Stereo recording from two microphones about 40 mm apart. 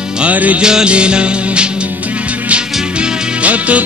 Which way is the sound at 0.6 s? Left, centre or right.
Right.